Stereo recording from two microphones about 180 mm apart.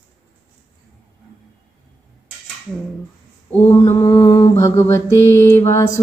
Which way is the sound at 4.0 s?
20° left (ahead or behind).